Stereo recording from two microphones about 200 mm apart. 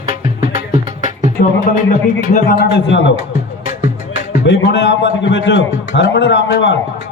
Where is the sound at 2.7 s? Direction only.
60° left (ahead or behind).